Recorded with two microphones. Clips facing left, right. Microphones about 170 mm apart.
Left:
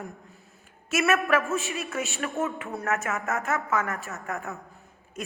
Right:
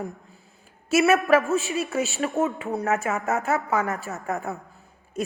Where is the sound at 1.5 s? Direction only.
30° right (ahead or behind).